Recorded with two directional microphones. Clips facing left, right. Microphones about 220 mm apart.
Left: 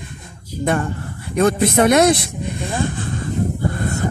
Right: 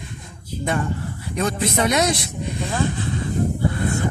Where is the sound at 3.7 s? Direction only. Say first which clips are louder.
Left 1 dB; 45° left (ahead or behind).